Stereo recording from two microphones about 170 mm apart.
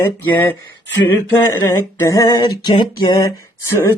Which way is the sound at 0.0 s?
10° left (ahead or behind).